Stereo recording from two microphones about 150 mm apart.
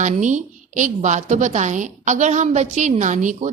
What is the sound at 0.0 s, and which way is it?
A woman's voice, 55° right (ahead or behind).